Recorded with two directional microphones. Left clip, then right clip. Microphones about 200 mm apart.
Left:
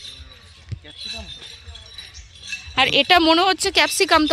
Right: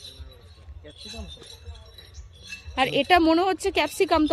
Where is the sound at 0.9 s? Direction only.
60° right (ahead or behind).